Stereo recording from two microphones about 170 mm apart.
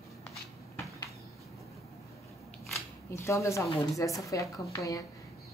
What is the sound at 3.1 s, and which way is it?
A woman's voice, 15° left (ahead or behind).